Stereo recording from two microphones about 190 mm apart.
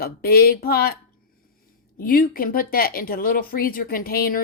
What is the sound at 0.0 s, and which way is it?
Speech, 55° left (ahead or behind).